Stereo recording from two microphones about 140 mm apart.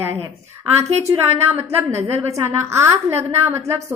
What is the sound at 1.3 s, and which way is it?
A woman's voice, 15° right (ahead or behind).